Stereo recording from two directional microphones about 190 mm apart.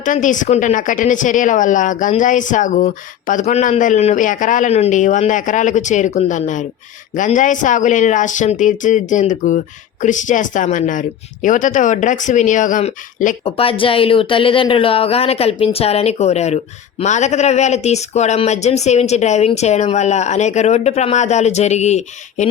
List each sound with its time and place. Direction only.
0.0 s speech: 40° left (ahead or behind)
13.4 s speech: 30° left (ahead or behind)